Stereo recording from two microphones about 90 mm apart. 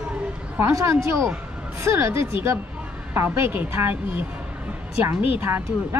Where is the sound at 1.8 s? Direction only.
25° right (ahead or behind).